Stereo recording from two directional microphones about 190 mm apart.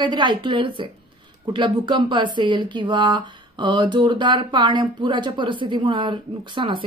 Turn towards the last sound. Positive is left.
turn(degrees=-25)  # may be behind; listen again after turning